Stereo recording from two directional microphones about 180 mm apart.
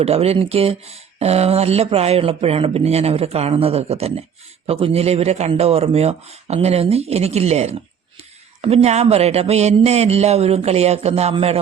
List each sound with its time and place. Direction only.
0.0 s speech: 35° right (ahead or behind)